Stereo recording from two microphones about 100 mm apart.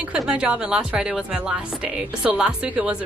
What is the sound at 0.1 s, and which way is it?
Speech, 10° right (ahead or behind).